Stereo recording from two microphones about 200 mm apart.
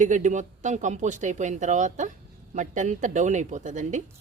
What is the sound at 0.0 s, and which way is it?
Speech, 40° right (ahead or behind).